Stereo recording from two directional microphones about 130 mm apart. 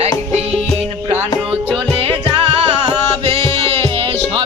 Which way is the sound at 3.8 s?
45° right (ahead or behind).